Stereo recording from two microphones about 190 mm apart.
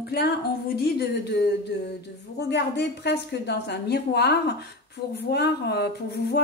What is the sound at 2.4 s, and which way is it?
Speech, 60° left (ahead or behind).